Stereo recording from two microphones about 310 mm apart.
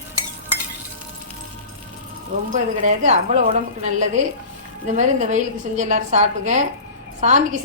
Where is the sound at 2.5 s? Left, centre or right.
Right.